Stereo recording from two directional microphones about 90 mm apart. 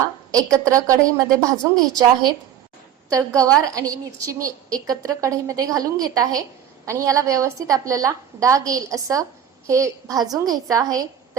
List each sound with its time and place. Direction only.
0.3 s a woman's voice: 40° right (ahead or behind)